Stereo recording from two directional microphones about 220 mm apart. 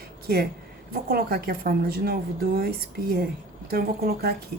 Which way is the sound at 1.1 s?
45° right (ahead or behind).